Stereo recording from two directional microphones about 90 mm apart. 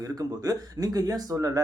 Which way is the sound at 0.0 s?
45° right (ahead or behind).